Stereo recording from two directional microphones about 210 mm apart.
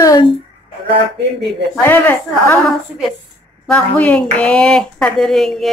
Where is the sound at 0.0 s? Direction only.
15° left (ahead or behind).